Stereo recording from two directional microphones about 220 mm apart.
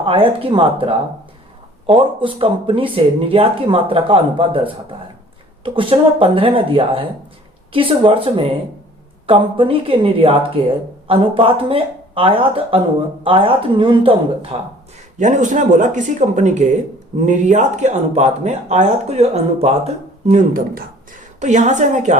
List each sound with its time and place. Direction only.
0.0 s speech: 25° right (ahead or behind)